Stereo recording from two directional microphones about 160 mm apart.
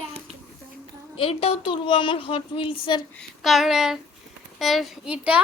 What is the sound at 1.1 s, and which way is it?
A woman's voice, 35° left (ahead or behind).